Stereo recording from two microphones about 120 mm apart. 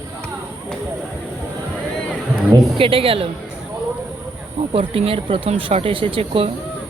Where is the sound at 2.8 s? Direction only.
50° right (ahead or behind).